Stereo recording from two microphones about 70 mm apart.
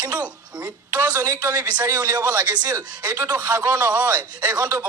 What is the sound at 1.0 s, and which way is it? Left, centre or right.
Speech, right.